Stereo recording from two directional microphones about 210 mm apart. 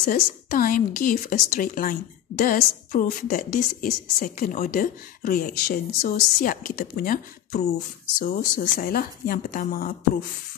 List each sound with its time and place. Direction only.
0.0 s a woman's voice: 40° left (ahead or behind)